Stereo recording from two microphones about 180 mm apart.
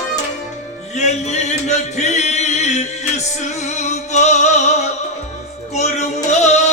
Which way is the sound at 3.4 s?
40° left (ahead or behind).